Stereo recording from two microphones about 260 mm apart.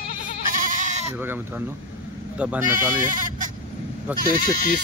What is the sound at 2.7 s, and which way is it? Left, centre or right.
Speech, right.